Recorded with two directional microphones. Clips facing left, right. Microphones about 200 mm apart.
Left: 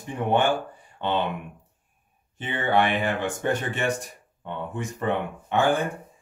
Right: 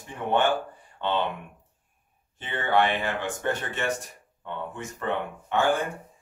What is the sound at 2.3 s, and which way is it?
Speech, 15° left (ahead or behind).